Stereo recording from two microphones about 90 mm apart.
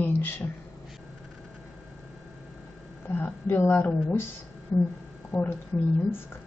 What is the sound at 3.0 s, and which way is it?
Speech, 20° left (ahead or behind).